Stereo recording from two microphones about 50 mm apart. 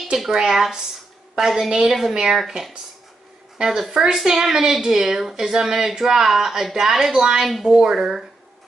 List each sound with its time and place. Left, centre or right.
0.2 s a woman's voice: centre
7.4 s speech: centre
7.7 s a woman's voice: centre